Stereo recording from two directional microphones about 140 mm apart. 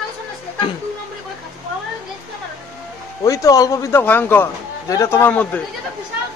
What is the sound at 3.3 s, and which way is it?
Speech, 25° left (ahead or behind).